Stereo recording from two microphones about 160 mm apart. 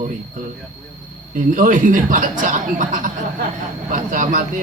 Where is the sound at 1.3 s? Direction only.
55° right (ahead or behind).